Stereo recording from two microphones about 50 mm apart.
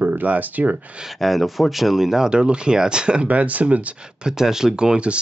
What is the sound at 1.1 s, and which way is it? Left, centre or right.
Speech, centre.